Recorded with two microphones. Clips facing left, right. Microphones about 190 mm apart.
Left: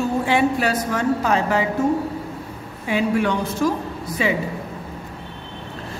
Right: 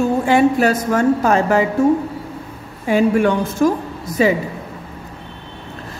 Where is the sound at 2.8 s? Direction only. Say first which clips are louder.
Right 6 dB; 45° right (ahead or behind).